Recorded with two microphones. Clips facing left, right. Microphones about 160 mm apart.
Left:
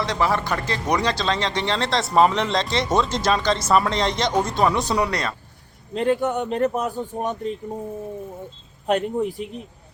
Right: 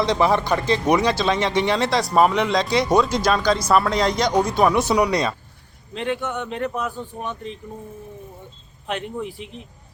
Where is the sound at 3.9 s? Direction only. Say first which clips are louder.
Right 2 dB; 5° right (ahead or behind).